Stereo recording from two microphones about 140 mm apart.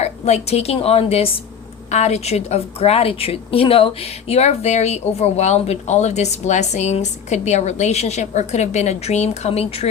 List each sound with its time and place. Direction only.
0.0 s a woman's voice: 50° left (ahead or behind)